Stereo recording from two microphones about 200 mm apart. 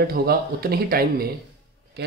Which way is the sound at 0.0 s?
50° right (ahead or behind).